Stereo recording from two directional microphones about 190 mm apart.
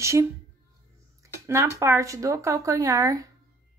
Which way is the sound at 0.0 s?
15° right (ahead or behind).